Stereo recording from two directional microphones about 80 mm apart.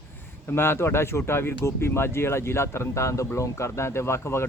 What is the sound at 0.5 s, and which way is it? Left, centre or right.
A man's voice, left.